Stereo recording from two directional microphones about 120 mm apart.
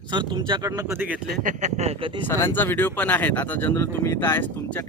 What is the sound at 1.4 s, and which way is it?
Speech, 85° right.